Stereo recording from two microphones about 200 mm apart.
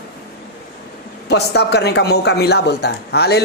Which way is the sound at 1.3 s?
55° left (ahead or behind).